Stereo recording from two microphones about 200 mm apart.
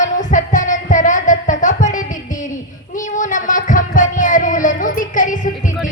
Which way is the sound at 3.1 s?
40° left (ahead or behind).